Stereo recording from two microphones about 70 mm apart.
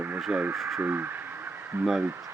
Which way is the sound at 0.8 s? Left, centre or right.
Right.